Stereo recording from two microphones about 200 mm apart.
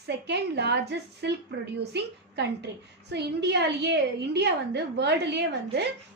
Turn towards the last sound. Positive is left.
turn(degrees=-55)  # may be behind; listen again after turning